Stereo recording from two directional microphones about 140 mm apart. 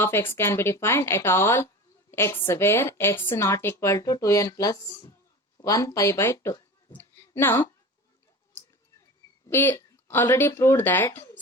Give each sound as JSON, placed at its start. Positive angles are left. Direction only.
{"t": 0.0, "sound": "a woman's voice", "side_deg": 15}
{"t": 6.9, "sound": "a sound", "side_deg": 15}
{"t": 9.5, "sound": "speech", "side_deg": 15}